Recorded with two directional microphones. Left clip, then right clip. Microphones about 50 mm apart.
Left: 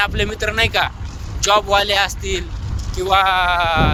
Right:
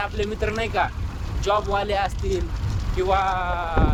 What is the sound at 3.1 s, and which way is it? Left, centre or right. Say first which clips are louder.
Speech: left 9 dB; left.